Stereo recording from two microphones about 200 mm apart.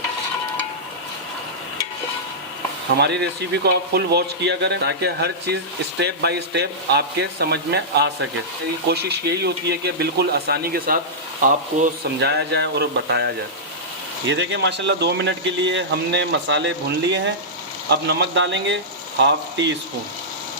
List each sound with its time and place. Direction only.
3.6 s speech: 55° right (ahead or behind)
12.2 s speech: 55° right (ahead or behind)